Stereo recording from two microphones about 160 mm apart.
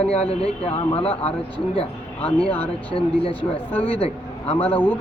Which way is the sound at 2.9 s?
35° left (ahead or behind).